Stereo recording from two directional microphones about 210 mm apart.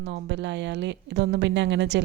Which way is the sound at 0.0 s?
55° right (ahead or behind).